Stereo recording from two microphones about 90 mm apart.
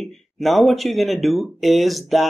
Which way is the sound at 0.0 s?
Centre (ahead or behind).